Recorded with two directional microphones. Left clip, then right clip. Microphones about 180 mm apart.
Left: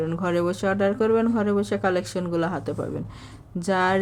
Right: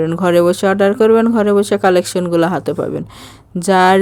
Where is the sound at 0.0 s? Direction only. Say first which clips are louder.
Right 12 dB; 50° right (ahead or behind).